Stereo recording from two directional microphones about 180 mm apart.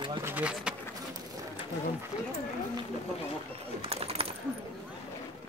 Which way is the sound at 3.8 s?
35° right (ahead or behind).